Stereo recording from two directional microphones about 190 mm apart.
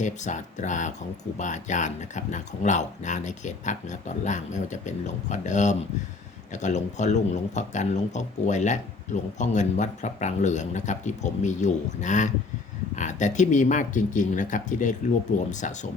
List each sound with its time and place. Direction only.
0.0 s a man's voice: 40° left (ahead or behind)